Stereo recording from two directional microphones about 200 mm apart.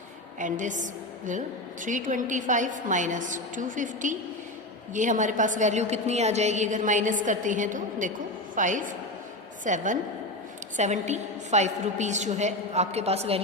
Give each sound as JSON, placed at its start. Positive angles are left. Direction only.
{"t": 0.3, "sound": "a woman's voice", "side_deg": -40}